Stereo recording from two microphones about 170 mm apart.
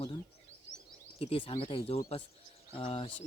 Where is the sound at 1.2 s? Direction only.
35° left (ahead or behind).